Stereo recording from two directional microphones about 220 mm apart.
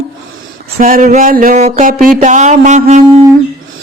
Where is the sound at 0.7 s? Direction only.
35° right (ahead or behind).